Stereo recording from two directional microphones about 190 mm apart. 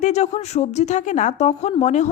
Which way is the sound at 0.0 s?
35° left (ahead or behind).